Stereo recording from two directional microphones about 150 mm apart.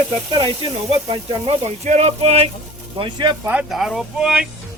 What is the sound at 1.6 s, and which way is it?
Speech, 50° right (ahead or behind).